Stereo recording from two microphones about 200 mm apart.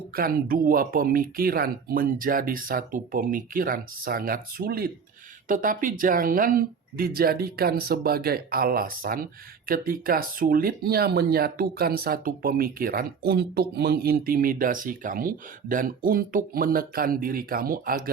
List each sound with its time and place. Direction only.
0.2 s speech: 45° right (ahead or behind)